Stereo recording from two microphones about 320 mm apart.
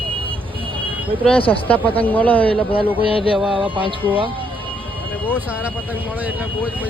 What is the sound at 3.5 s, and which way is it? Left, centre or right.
Music, centre.